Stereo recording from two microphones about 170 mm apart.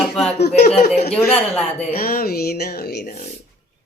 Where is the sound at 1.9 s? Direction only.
60° left (ahead or behind).